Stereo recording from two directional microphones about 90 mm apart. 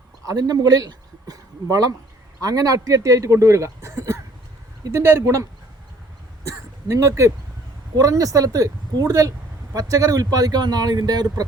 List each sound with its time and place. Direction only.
0.3 s speech: 45° right (ahead or behind)